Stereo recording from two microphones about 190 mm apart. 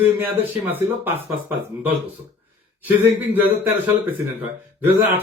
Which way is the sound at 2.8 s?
10° right (ahead or behind).